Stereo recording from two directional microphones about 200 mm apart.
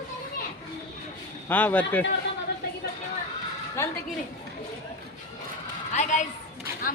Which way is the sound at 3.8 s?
15° left (ahead or behind).